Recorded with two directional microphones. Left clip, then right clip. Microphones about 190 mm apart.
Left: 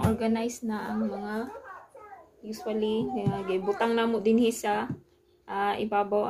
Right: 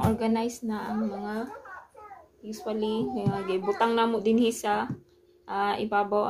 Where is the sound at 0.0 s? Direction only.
Centre (ahead or behind).